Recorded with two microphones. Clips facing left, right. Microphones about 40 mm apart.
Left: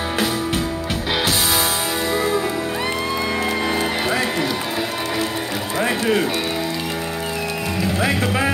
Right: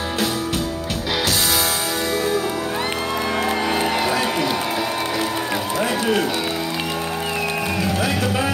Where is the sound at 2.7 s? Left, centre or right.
Right.